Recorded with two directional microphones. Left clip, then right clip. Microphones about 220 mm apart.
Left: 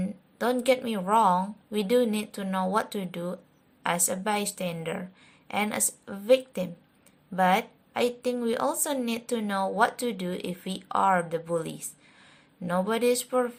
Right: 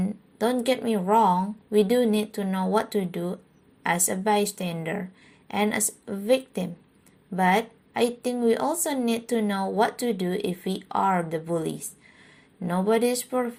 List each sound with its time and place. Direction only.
0.0 s a woman's voice: 15° left (ahead or behind)